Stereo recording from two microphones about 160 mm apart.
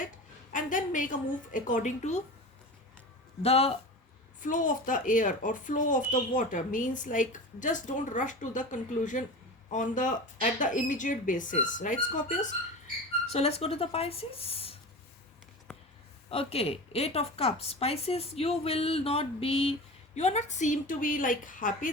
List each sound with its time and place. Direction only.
0.5 s a woman's voice: 55° left (ahead or behind)
3.4 s speech: 40° left (ahead or behind)
4.4 s speech: 55° left (ahead or behind)
13.2 s speech: 40° left (ahead or behind)
16.3 s a woman's voice: 35° left (ahead or behind); by 21.8 s 55° left (ahead or behind)